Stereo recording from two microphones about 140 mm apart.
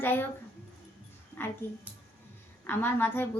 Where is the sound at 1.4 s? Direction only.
15° left (ahead or behind).